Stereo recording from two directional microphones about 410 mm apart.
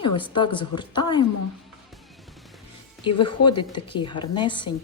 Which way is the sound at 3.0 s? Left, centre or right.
Centre.